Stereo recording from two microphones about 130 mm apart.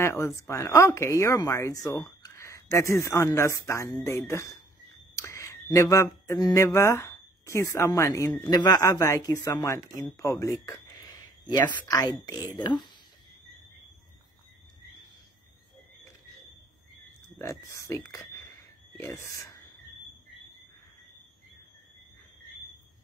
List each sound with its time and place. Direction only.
0.0 s speech: 20° left (ahead or behind)
8.5 s speech: 30° left (ahead or behind)
11.4 s speech: 35° left (ahead or behind)
17.4 s speech: 20° left (ahead or behind)